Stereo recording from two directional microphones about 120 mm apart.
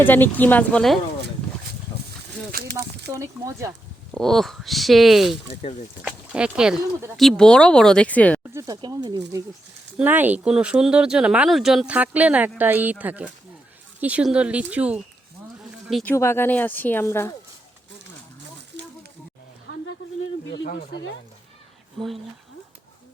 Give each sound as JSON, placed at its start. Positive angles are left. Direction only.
{"t": 0.0, "sound": "speech", "side_deg": 15}
{"t": 2.7, "sound": "speech", "side_deg": -25}
{"t": 4.1, "sound": "speech", "side_deg": 0}
{"t": 7.2, "sound": "speech", "side_deg": 5}
{"t": 8.5, "sound": "speech", "side_deg": -30}
{"t": 10.0, "sound": "speech", "side_deg": -15}
{"t": 16.0, "sound": "speech", "side_deg": 20}